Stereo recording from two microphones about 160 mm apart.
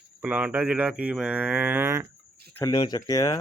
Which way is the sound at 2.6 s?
25° left (ahead or behind).